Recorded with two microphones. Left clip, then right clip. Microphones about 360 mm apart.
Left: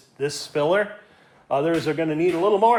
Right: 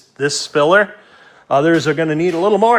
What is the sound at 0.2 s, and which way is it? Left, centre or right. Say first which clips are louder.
Speech: right 9 dB; right.